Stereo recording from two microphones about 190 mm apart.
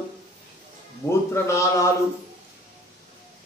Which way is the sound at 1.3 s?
15° left (ahead or behind).